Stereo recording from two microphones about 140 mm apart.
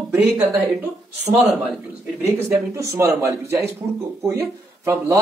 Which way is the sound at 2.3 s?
20° right (ahead or behind).